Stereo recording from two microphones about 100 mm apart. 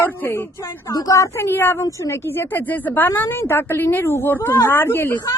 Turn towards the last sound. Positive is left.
turn(degrees=25)  # may be behind; listen again after turning